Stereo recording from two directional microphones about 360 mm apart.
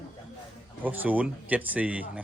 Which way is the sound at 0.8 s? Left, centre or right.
Centre.